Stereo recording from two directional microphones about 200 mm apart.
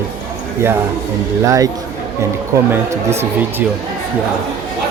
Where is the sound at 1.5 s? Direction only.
15° right (ahead or behind).